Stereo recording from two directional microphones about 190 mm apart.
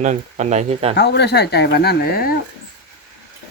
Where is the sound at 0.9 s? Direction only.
60° left (ahead or behind).